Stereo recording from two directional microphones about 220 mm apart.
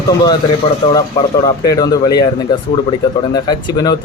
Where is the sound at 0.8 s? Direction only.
20° left (ahead or behind).